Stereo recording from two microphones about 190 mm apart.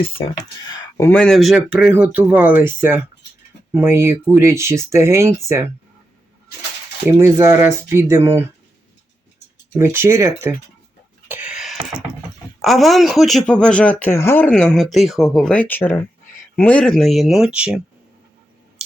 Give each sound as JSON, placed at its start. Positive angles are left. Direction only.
{"t": 0.9, "sound": "speech", "side_deg": 10}
{"t": 7.1, "sound": "speech", "side_deg": -15}
{"t": 9.7, "sound": "speech", "side_deg": -15}
{"t": 11.3, "sound": "a sound", "side_deg": -5}
{"t": 12.6, "sound": "speech", "side_deg": 0}
{"t": 14.5, "sound": "speech", "side_deg": 0}